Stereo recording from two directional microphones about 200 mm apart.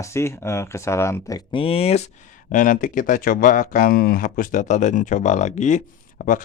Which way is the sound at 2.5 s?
40° left (ahead or behind).